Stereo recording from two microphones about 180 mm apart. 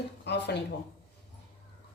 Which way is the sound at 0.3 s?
70° left (ahead or behind).